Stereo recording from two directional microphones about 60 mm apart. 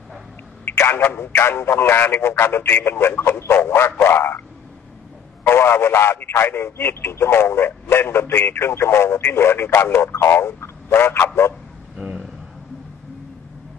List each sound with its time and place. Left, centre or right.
0.7 s speech: left
5.5 s speech: left
12.0 s a sound: centre